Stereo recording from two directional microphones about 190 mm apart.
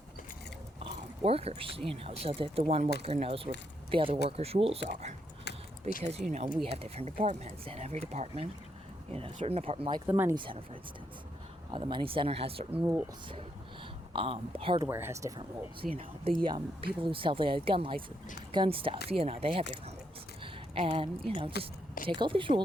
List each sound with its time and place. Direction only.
0.9 s a sound: 30° right (ahead or behind)
2.0 s speech: 30° right (ahead or behind)
5.5 s a sound: 60° left (ahead or behind)
6.0 s speech: 35° right (ahead or behind)
10.1 s speech: 10° right (ahead or behind)
10.3 s speech: 25° right (ahead or behind)
11.7 s speech: 25° right (ahead or behind)
12.7 s speech: 10° right (ahead or behind)
14.1 s speech: 30° right (ahead or behind)
14.8 s speech: 15° right (ahead or behind)
15.8 s speech: 40° right (ahead or behind)
16.4 s speech: 25° right (ahead or behind)
20.4 s a sound: 30° right (ahead or behind)
21.2 s speech: 30° right (ahead or behind)